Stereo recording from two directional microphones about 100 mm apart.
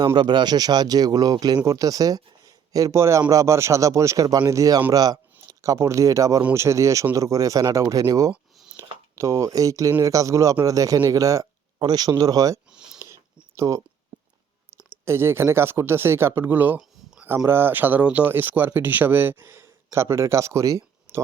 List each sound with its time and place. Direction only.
0.2 s speech: 45° right (ahead or behind)
12.7 s a sound: 5° right (ahead or behind)
13.6 s speech: 30° right (ahead or behind)
15.0 s speech: 25° right (ahead or behind)